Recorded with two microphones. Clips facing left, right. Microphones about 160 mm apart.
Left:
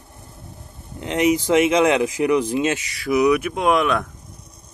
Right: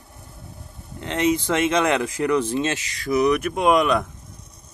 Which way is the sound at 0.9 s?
15° left (ahead or behind).